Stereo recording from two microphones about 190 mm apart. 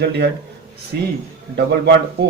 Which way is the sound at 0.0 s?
60° right (ahead or behind).